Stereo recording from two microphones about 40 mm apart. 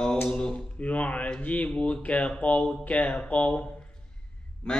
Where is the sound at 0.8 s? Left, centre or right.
Left.